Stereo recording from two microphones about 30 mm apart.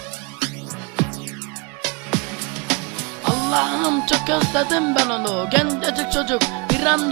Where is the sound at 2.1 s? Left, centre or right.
Centre.